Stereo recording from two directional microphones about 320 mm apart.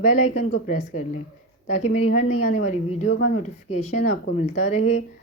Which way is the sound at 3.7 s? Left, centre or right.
Left.